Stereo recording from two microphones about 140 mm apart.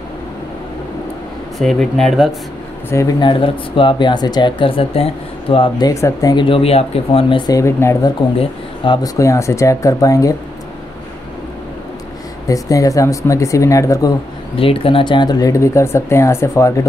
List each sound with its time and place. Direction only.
1.6 s speech: centre (ahead or behind)
2.9 s speech: 20° left (ahead or behind)
3.2 s speech: 35° left (ahead or behind)
5.9 s speech: 25° left (ahead or behind)
6.3 s speech: 40° left (ahead or behind)
7.5 s speech: 20° left (ahead or behind)
8.4 s speech: 35° left (ahead or behind)
12.4 s speech: 25° left (ahead or behind)
14.6 s speech: 40° left (ahead or behind); by 16.8 s 20° left (ahead or behind)